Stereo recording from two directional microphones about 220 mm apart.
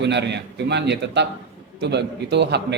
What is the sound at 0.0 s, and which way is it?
A man's voice, 50° right (ahead or behind).